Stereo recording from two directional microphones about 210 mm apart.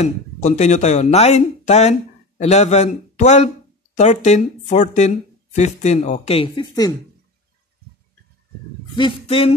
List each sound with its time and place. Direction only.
0.0 s speech: 35° left (ahead or behind)
8.9 s speech: 25° left (ahead or behind)